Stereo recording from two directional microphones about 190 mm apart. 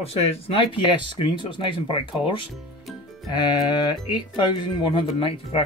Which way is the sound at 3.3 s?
25° left (ahead or behind).